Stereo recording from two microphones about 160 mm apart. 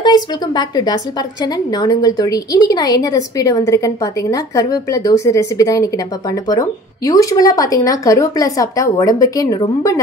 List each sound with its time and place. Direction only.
0.0 s a woman's voice: 30° left (ahead or behind)